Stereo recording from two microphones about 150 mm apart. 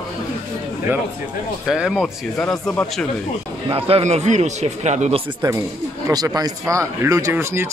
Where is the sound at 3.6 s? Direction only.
40° right (ahead or behind).